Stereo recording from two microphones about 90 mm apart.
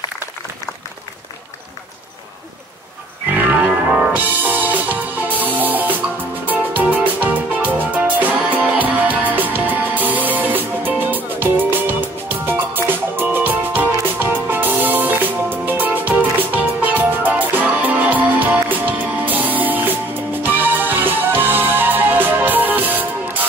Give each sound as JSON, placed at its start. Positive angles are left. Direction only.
{"t": 3.3, "sound": "music", "side_deg": -20}